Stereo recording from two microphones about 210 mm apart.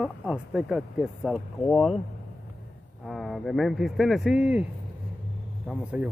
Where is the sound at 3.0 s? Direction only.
Centre (ahead or behind).